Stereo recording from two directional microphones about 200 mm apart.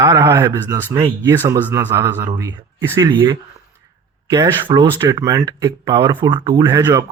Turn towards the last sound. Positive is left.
turn(degrees=-20)  # may be behind; listen again after turning